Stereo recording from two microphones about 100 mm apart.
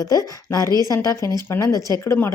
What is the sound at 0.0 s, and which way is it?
Speech, 35° left (ahead or behind).